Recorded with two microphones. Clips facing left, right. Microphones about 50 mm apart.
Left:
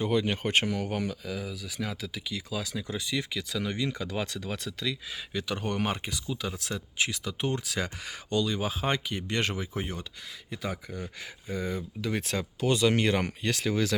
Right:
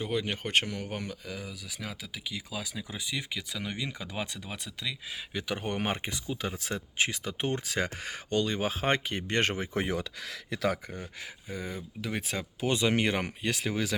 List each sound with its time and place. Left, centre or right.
0.0 s speech: centre; by 9.6 s right
9.7 s speech: right
11.0 s speech: centre
12.6 s speech: right